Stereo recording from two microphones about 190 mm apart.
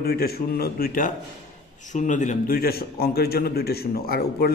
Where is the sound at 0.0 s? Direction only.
55° left (ahead or behind).